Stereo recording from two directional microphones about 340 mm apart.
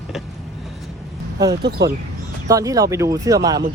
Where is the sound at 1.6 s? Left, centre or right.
Right.